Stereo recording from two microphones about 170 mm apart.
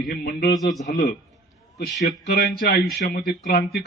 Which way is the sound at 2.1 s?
75° left (ahead or behind).